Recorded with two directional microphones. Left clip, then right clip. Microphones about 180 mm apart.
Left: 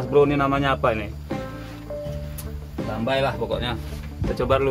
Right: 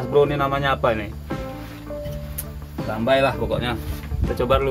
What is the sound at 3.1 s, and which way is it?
Speech, 10° left (ahead or behind).